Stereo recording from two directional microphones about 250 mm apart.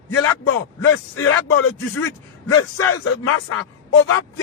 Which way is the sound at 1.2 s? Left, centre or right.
Left.